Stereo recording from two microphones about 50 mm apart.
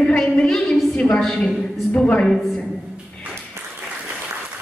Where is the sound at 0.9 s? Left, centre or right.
Left.